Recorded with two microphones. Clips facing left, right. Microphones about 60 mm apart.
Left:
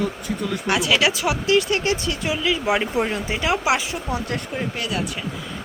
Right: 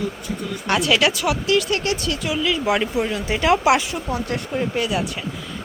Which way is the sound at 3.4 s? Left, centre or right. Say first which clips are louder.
Right 5 dB; centre.